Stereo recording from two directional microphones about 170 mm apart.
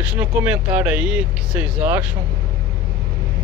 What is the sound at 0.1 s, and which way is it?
Speech, 5° right (ahead or behind).